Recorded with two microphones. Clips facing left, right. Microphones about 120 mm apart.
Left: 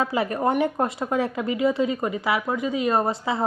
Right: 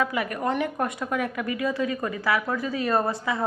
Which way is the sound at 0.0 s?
30° left (ahead or behind).